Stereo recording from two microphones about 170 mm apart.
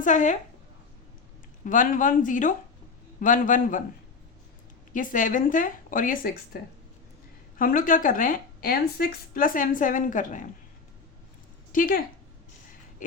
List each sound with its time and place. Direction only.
0.0 s a woman's voice: 45° left (ahead or behind)
1.6 s a woman's voice: 50° left (ahead or behind)
4.9 s a woman's voice: 50° left (ahead or behind)
7.6 s a woman's voice: 55° left (ahead or behind)
11.7 s speech: 55° left (ahead or behind)
13.0 s a sound: 50° left (ahead or behind)